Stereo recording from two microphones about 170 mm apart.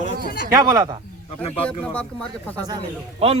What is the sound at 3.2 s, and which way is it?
Speech, 40° right (ahead or behind).